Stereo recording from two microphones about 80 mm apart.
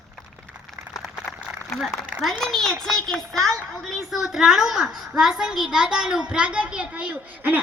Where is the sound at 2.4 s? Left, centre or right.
Centre.